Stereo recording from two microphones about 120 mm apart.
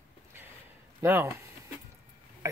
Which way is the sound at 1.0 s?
20° right (ahead or behind).